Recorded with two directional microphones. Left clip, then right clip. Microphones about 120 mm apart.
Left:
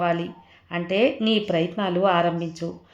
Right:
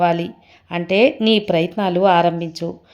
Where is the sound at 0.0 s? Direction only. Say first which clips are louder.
Right 6 dB; 30° right (ahead or behind).